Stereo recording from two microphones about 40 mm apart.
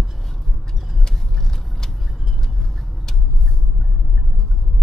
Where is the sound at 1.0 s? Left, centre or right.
Centre.